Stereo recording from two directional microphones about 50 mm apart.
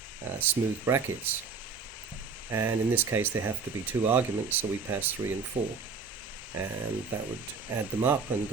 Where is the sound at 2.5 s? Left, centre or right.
Right.